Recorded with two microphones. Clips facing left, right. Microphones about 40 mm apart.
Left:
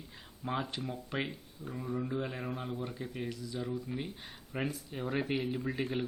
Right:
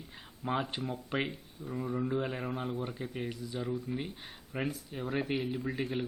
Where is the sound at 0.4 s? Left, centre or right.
Centre.